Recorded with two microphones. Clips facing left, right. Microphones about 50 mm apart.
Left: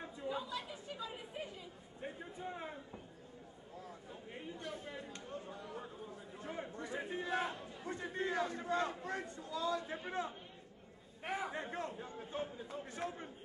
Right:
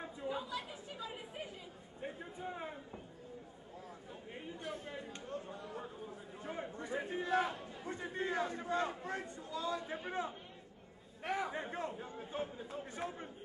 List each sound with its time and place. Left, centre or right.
0.0 s chatter: centre
0.6 s speech: centre
2.0 s a sound: centre
4.1 s chatter: centre
5.8 s a sound: centre
7.9 s crowd: centre
9.8 s a man's voice: centre
11.2 s a sound: centre
11.5 s a man's voice: centre